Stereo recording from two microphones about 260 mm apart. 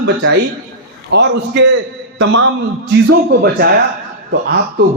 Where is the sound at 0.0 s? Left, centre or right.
Right.